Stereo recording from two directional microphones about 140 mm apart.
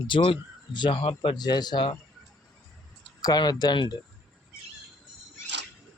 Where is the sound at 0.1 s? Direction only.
40° left (ahead or behind).